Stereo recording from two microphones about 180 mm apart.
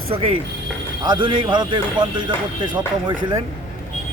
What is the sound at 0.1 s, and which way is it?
A man's voice, 30° right (ahead or behind).